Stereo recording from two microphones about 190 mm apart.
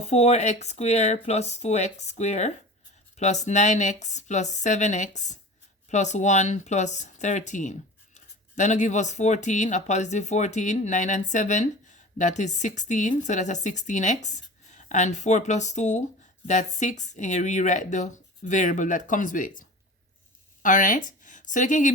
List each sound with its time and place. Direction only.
0.0 s a woman's voice: 35° left (ahead or behind)